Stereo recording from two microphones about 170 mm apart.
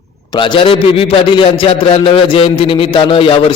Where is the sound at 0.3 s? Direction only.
30° left (ahead or behind).